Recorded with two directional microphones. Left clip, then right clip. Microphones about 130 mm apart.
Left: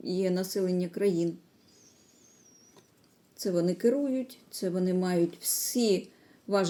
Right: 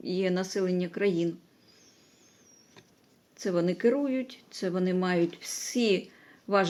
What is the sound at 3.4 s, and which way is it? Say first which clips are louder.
Speech: right 1 dB; 30° left (ahead or behind).